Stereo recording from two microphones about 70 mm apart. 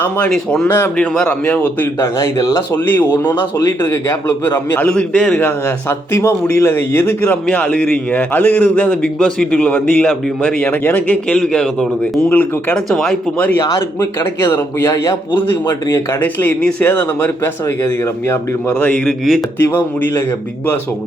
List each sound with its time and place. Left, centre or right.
0.3 s a man's voice: centre
2.0 s a man's voice: left
2.7 s a man's voice: left
3.8 s a man's voice: left
4.9 s a man's voice: centre
5.4 s a man's voice: left
7.5 s a man's voice: centre
11.1 s a man's voice: centre
12.3 s a man's voice: left
12.7 s a man's voice: centre
13.6 s a man's voice: left
18.8 s a man's voice: centre
19.0 s speech: centre
19.7 s a man's voice: left